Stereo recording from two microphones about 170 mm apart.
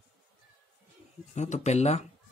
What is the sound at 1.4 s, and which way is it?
Speech, 40° left (ahead or behind).